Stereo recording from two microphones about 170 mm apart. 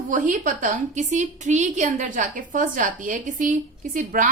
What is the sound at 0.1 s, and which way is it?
A woman's voice, 50° right (ahead or behind).